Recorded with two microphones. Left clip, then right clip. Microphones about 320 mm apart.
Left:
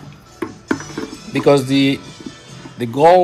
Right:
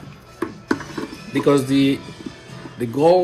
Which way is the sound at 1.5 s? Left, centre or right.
Left.